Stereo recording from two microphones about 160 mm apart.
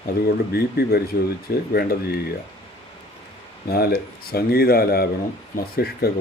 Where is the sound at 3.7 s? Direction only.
75° left (ahead or behind).